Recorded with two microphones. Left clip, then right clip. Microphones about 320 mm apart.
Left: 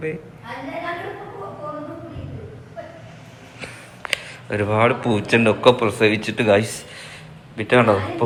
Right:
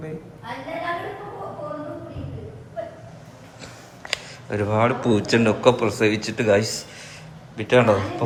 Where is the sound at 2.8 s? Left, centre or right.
Centre.